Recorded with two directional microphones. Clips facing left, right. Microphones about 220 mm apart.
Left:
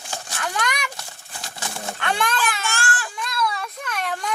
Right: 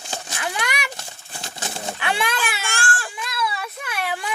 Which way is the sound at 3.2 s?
5° right (ahead or behind).